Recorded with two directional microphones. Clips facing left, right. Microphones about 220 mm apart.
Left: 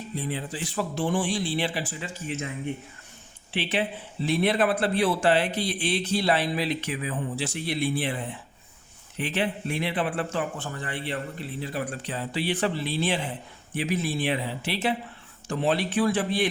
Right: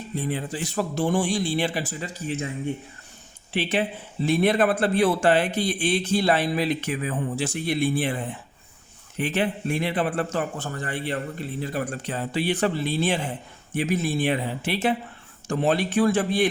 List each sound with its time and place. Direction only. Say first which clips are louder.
0.2 s a man's voice: right 4 dB; 50° right (ahead or behind)
3.5 s a man's voice: right 3 dB; 45° right (ahead or behind)